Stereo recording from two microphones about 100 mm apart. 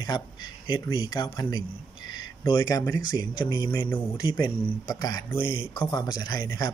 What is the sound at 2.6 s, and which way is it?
A man's voice, 35° left (ahead or behind).